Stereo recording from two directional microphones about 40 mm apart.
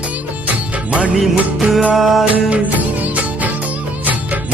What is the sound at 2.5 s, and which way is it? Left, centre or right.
Music, right.